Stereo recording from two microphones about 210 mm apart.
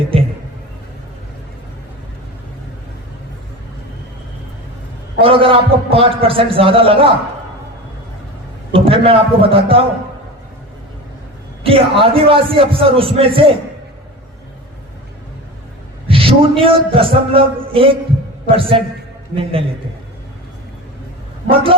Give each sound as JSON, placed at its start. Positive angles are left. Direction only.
{"t": 5.2, "sound": "a man's voice", "side_deg": -25}
{"t": 8.7, "sound": "a man's voice", "side_deg": -25}
{"t": 11.6, "sound": "a man's voice", "side_deg": -25}
{"t": 16.0, "sound": "a man's voice", "side_deg": -25}
{"t": 21.5, "sound": "a man's voice", "side_deg": -25}